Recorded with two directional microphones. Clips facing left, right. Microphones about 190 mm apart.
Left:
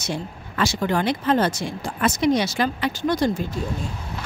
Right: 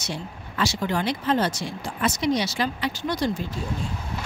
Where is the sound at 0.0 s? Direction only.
50° left (ahead or behind).